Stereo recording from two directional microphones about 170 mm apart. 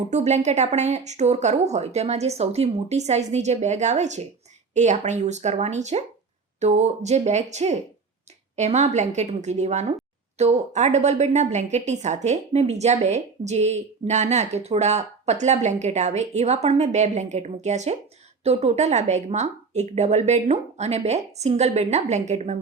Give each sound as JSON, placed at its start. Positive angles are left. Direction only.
{"t": 0.1, "sound": "a woman's voice", "side_deg": -40}